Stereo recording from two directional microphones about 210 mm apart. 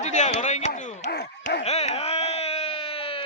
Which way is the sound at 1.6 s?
30° left (ahead or behind).